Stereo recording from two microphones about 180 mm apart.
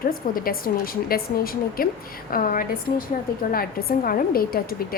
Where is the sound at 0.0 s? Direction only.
55° left (ahead or behind).